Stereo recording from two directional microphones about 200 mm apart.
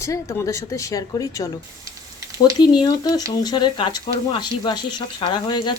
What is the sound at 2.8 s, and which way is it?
Speech, 20° left (ahead or behind).